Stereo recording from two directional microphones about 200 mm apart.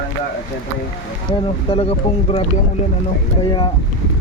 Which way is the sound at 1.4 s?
30° left (ahead or behind).